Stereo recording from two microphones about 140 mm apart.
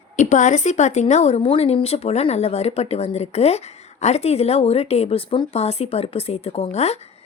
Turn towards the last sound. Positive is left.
turn(degrees=50)  # may be behind; listen again after turning